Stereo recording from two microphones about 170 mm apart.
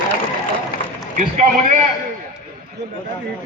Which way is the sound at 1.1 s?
50° right (ahead or behind).